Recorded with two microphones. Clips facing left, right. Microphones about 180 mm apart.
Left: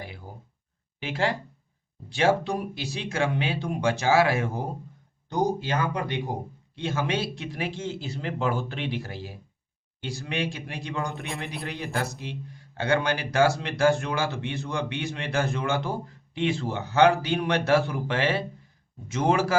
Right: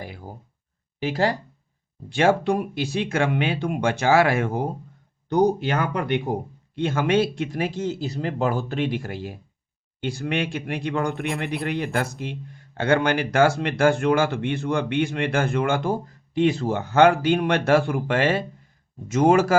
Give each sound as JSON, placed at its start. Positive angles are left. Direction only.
{"t": 0.9, "sound": "speech", "side_deg": -40}
{"t": 2.0, "sound": "speech", "side_deg": -50}